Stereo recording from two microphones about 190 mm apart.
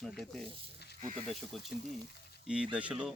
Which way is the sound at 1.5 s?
Centre (ahead or behind).